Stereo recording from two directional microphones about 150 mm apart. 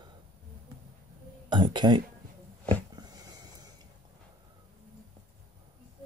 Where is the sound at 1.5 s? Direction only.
30° right (ahead or behind).